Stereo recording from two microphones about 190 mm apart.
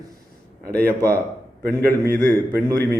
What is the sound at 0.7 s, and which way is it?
A man's voice, 50° right (ahead or behind).